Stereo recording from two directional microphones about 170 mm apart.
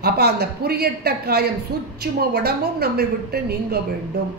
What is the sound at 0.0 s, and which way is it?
Speech, 70° right (ahead or behind).